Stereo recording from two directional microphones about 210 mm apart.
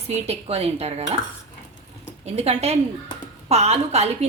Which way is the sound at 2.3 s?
30° right (ahead or behind).